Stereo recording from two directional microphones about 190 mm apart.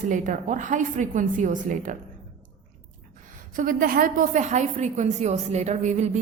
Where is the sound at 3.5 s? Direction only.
45° right (ahead or behind).